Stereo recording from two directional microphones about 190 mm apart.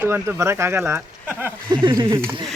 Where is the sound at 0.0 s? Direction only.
10° right (ahead or behind).